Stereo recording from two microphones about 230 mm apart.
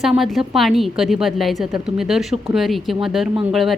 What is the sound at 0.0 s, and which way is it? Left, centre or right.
A woman's voice, centre.